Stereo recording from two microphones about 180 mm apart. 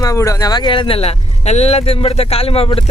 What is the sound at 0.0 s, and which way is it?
Speech, 20° left (ahead or behind).